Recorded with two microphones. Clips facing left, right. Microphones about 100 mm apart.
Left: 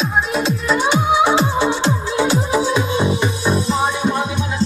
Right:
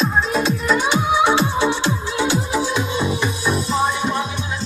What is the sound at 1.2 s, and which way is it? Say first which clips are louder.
Music: left 1 dB; 25° left (ahead or behind).